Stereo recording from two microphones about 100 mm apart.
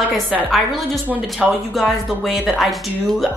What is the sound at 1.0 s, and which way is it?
Speech, 15° right (ahead or behind).